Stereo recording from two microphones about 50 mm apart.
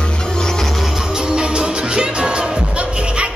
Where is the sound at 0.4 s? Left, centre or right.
Centre.